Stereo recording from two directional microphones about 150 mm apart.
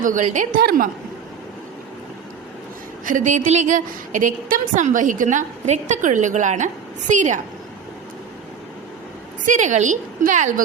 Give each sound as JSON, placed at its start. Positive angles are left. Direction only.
{"t": 0.0, "sound": "a woman's voice", "side_deg": -60}
{"t": 3.1, "sound": "a woman's voice", "side_deg": -60}
{"t": 9.5, "sound": "a woman's voice", "side_deg": -55}